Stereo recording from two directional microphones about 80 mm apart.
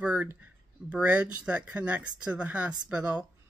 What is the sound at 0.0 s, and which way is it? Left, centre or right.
Speech, centre.